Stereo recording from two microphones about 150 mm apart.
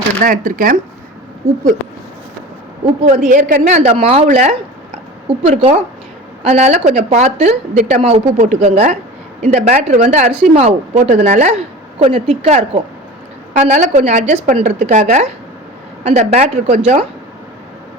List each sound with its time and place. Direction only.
0.2 s speech: 65° right (ahead or behind)
3.2 s a woman's voice: 65° right (ahead or behind)
3.9 s speech: 40° right (ahead or behind)
4.3 s a woman's voice: 60° right (ahead or behind)
5.5 s a woman's voice: 45° right (ahead or behind)
11.9 s a woman's voice: 45° right (ahead or behind)